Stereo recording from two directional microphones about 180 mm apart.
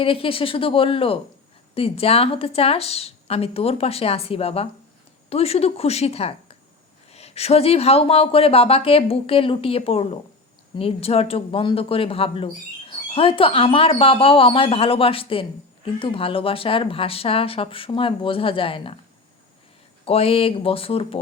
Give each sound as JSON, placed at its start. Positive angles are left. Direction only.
{"t": 0.0, "sound": "speech", "side_deg": 30}
{"t": 20.1, "sound": "speech", "side_deg": 35}